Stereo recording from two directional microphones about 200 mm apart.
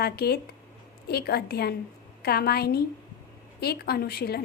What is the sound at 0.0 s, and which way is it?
A woman's voice, 50° left (ahead or behind).